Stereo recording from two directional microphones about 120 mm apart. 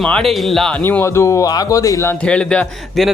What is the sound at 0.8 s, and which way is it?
A man's voice, 20° left (ahead or behind).